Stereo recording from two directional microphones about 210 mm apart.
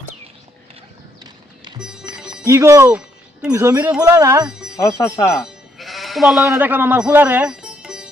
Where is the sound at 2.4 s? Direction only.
15° right (ahead or behind).